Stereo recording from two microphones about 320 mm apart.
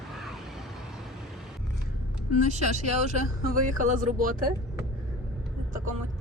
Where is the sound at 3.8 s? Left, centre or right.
Right.